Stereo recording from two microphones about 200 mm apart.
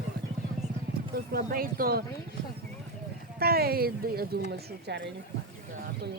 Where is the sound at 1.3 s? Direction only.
45° right (ahead or behind).